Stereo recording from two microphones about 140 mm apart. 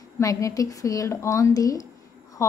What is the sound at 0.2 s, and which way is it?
A woman's voice, 25° left (ahead or behind).